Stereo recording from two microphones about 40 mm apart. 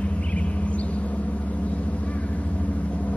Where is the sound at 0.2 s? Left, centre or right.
Left.